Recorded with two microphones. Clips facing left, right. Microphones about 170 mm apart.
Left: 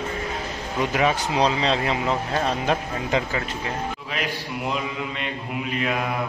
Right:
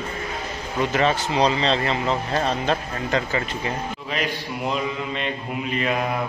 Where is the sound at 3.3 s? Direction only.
Centre (ahead or behind).